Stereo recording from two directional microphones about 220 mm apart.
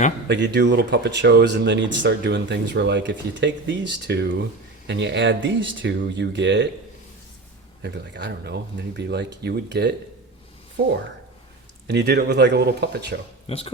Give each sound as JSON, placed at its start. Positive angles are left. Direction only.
{"t": 0.3, "sound": "speech", "side_deg": -50}
{"t": 7.8, "sound": "speech", "side_deg": -50}
{"t": 11.9, "sound": "speech", "side_deg": -50}
{"t": 13.5, "sound": "speech", "side_deg": 25}